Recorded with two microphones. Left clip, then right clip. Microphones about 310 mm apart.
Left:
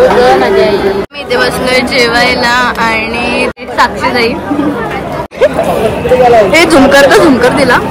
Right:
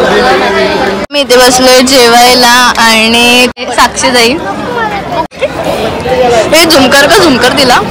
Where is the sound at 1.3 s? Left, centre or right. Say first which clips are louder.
Right 6 dB; centre.